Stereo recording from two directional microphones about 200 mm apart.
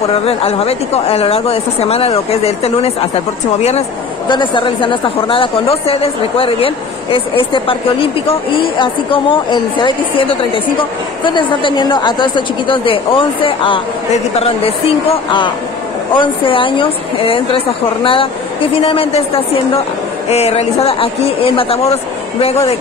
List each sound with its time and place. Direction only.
0.1 s speech: 30° left (ahead or behind)